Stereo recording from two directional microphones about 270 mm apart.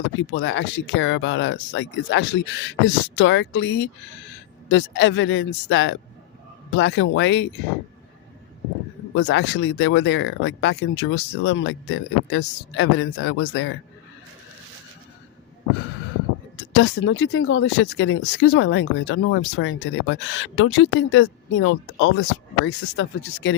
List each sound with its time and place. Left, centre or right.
0.2 s speech: left
9.1 s speech: left
16.7 s speech: left